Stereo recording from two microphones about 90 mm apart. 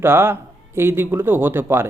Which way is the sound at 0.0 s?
25° right (ahead or behind).